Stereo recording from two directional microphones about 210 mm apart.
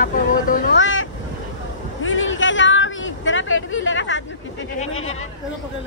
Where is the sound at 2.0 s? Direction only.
70° left (ahead or behind).